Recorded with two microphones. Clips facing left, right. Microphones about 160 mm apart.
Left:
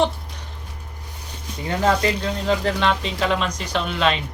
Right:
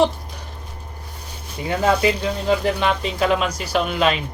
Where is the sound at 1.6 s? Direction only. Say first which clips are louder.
Right 2 dB; 15° right (ahead or behind).